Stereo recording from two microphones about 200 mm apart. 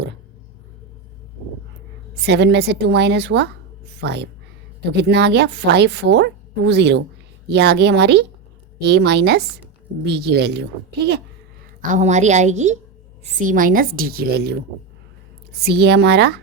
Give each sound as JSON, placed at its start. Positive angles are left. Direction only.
{"t": 2.2, "sound": "a woman's voice", "side_deg": -55}
{"t": 11.8, "sound": "a woman's voice", "side_deg": -35}
{"t": 15.6, "sound": "a woman's voice", "side_deg": -55}